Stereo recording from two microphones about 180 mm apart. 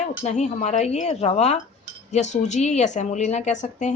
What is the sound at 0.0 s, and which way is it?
Speech, 40° left (ahead or behind).